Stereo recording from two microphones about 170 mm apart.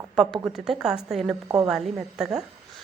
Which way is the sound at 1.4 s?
20° right (ahead or behind).